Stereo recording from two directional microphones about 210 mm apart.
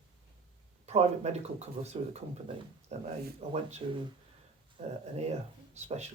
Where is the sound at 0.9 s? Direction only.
30° right (ahead or behind).